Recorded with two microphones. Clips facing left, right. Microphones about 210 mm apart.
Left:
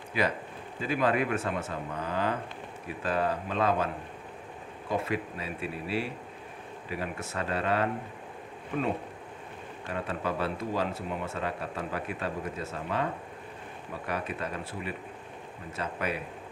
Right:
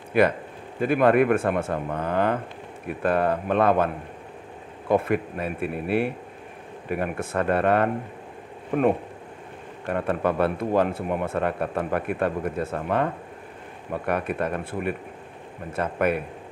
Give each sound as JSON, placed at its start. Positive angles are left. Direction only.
{"t": 0.1, "sound": "speech", "side_deg": -55}